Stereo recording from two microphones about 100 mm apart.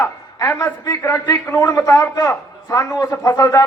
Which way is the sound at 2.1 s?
35° left (ahead or behind).